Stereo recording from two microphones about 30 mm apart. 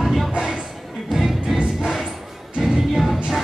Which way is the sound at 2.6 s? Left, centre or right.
Centre.